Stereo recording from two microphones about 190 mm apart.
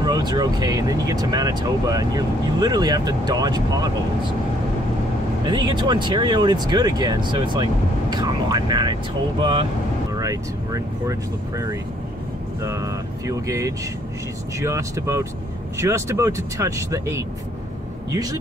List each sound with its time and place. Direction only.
0.0 s speech: 20° right (ahead or behind)
5.4 s speech: 20° right (ahead or behind)
12.6 s speech: 15° right (ahead or behind)